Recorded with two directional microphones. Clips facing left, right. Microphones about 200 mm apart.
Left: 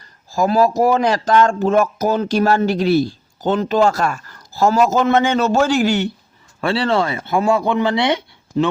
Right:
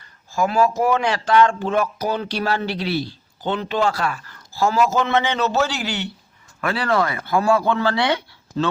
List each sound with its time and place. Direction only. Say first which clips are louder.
0.3 s speech: left 4 dB; 35° left (ahead or behind)
6.6 s speech: left 3 dB; 30° left (ahead or behind)